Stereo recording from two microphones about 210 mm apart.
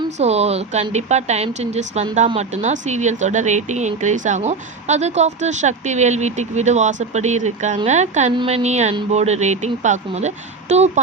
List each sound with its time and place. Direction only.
0.2 s speech: 30° right (ahead or behind)